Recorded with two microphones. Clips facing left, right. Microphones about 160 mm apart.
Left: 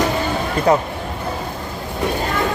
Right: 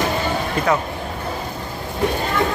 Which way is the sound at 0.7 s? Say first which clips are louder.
Left 5 dB; 35° left (ahead or behind).